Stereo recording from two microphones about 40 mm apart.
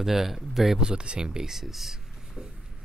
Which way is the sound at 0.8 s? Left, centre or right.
Right.